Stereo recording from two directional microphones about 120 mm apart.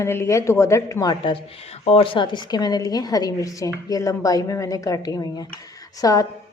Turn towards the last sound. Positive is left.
turn(degrees=30)  # may be behind; listen again after turning